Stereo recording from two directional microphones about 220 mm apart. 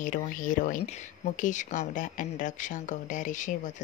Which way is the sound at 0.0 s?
35° left (ahead or behind).